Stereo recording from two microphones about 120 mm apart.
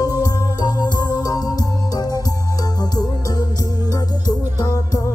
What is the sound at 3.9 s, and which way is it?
Music, 35° left (ahead or behind).